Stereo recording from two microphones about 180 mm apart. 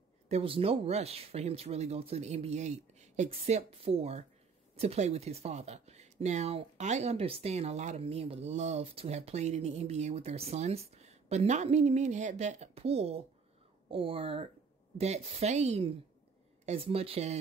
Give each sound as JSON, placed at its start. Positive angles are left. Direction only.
{"t": 0.3, "sound": "speech", "side_deg": -30}